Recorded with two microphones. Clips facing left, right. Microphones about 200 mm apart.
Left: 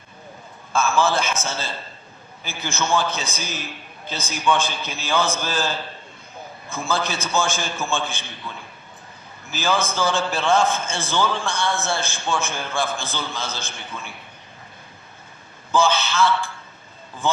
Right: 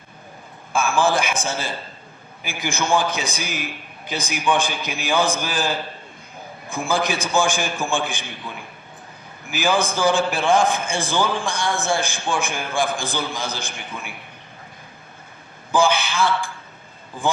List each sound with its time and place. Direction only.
0.7 s a man's voice: 15° right (ahead or behind)
15.7 s a man's voice: 15° right (ahead or behind)